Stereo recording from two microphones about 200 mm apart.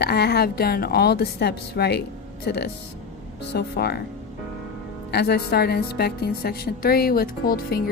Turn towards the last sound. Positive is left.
turn(degrees=50)  # may be behind; listen again after turning